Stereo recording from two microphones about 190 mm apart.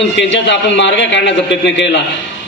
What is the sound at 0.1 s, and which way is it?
A man's voice, 70° left (ahead or behind).